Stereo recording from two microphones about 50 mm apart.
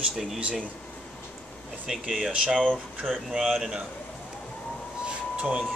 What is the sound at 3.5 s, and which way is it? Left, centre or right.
Speech, centre.